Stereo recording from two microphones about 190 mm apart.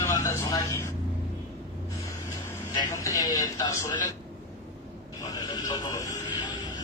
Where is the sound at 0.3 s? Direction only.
15° left (ahead or behind).